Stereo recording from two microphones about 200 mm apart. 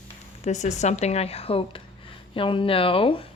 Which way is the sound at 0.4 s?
35° left (ahead or behind).